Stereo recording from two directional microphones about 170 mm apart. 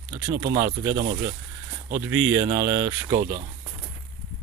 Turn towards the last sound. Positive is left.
turn(degrees=-20)  # may be behind; listen again after turning